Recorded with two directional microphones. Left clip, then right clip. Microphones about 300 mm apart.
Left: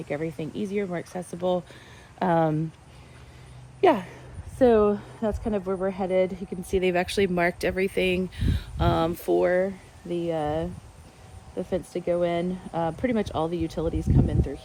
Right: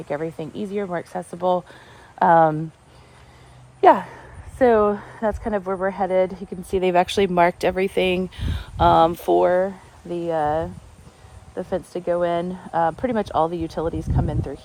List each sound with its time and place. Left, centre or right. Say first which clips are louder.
0.3 s speech: right 2 dB; centre
3.8 s a woman's voice: right 7 dB; centre